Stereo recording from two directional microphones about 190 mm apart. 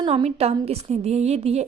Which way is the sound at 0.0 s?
35° right (ahead or behind).